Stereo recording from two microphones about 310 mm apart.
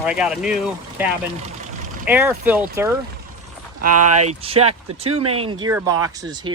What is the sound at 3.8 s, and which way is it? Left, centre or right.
Speech, right.